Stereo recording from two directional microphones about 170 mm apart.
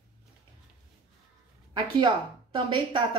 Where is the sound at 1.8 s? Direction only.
30° right (ahead or behind).